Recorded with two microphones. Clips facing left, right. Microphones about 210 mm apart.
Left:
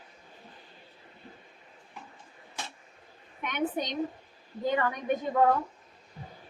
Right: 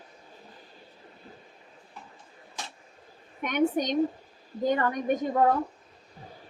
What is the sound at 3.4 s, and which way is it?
A woman's voice, 45° right (ahead or behind).